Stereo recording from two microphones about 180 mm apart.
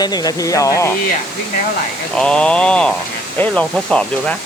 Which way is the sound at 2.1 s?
5° left (ahead or behind).